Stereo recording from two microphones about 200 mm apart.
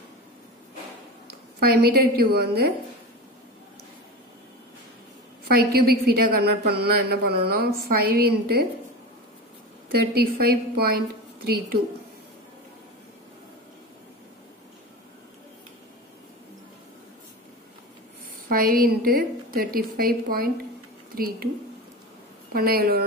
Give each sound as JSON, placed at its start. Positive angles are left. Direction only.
{"t": 1.2, "sound": "a woman's voice", "side_deg": -50}
{"t": 5.5, "sound": "a woman's voice", "side_deg": -50}
{"t": 10.1, "sound": "a woman's voice", "side_deg": -50}
{"t": 18.5, "sound": "a woman's voice", "side_deg": -45}
{"t": 22.5, "sound": "a woman's voice", "side_deg": -50}